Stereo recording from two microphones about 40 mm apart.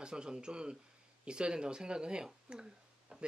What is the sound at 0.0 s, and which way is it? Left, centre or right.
Speech, right.